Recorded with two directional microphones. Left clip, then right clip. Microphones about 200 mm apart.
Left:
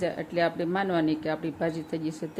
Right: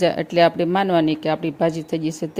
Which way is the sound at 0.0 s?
45° right (ahead or behind).